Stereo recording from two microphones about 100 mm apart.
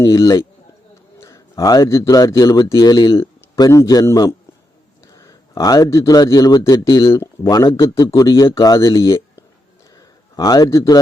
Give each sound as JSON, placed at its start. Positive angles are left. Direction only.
{"t": 0.0, "sound": "a man's voice", "side_deg": 40}
{"t": 7.1, "sound": "speech", "side_deg": 25}
{"t": 7.5, "sound": "a man's voice", "side_deg": 40}
{"t": 10.3, "sound": "a man's voice", "side_deg": 40}